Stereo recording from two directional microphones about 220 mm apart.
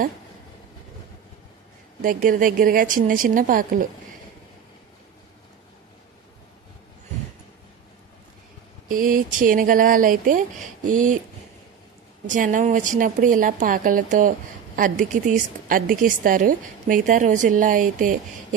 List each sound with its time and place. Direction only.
2.0 s a woman's voice: 40° right (ahead or behind)
8.8 s a woman's voice: 40° right (ahead or behind)
12.3 s a woman's voice: 35° right (ahead or behind)